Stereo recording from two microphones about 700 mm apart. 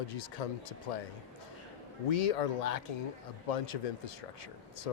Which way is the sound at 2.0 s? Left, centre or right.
Left.